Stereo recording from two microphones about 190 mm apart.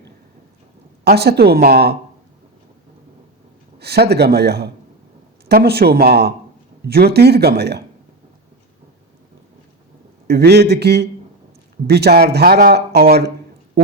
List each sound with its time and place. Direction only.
1.0 s a man's voice: 55° right (ahead or behind)
3.8 s a man's voice: 60° right (ahead or behind)
10.2 s a man's voice: 60° right (ahead or behind)